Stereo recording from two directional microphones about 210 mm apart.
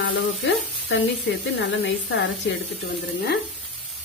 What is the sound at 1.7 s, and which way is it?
Speech, 60° left (ahead or behind).